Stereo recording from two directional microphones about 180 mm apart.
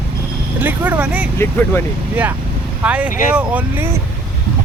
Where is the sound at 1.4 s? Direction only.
15° left (ahead or behind).